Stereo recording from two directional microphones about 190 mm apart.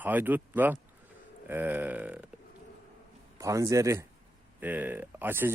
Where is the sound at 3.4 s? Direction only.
15° right (ahead or behind).